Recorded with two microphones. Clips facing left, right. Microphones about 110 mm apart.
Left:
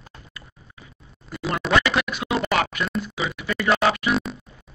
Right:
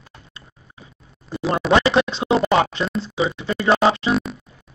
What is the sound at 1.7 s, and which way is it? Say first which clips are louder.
Scratch: right 5 dB; 30° right (ahead or behind).